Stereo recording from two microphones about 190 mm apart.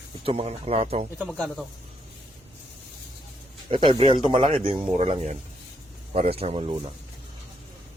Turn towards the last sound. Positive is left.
turn(degrees=-30)  # may be behind; listen again after turning